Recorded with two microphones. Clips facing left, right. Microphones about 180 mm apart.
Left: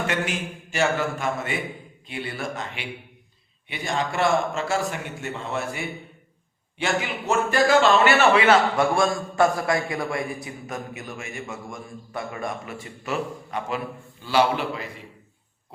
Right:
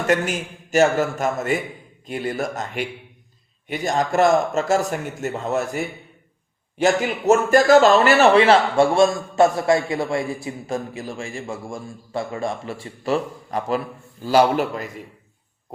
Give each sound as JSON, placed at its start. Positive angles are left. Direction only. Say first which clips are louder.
{"t": 0.1, "sound": "a man's voice", "louder": "right 6 dB", "side_deg": -45}